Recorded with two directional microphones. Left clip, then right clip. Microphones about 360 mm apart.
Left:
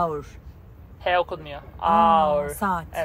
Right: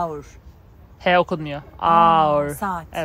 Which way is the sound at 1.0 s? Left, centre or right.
Right.